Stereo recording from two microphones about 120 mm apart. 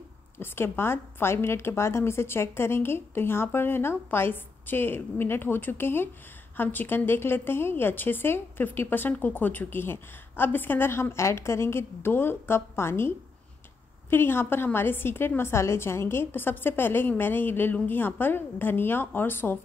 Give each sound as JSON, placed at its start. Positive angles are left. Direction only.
{"t": 0.4, "sound": "a woman's voice", "side_deg": 20}
{"t": 14.1, "sound": "a woman's voice", "side_deg": 20}